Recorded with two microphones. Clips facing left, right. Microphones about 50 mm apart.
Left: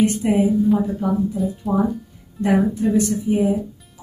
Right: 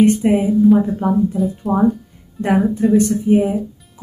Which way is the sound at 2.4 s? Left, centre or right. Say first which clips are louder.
Right 2 dB; right.